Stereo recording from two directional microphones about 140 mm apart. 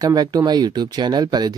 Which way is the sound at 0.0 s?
30° right (ahead or behind).